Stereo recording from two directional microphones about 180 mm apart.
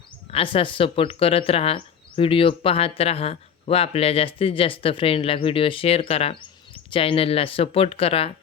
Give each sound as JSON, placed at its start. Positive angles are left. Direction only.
{"t": 0.3, "sound": "speech", "side_deg": 30}